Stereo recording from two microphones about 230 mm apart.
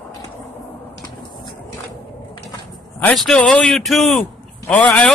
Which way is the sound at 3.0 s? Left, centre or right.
Centre.